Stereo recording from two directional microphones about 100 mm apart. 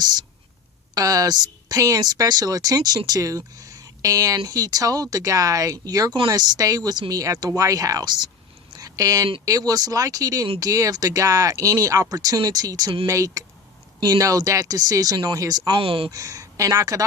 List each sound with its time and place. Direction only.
0.9 s speech: 35° right (ahead or behind)
8.7 s a sound: 35° right (ahead or behind)
9.5 s speech: 40° right (ahead or behind)
15.7 s speech: 65° right (ahead or behind)
16.0 s speech: 35° right (ahead or behind)